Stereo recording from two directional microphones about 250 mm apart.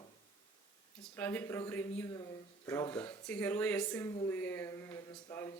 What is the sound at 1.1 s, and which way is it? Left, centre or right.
A man's voice, centre.